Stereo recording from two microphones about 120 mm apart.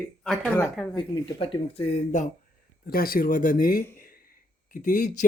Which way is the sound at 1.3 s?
55° left (ahead or behind).